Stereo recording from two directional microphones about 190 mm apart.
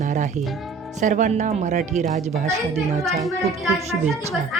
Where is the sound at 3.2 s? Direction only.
Centre (ahead or behind).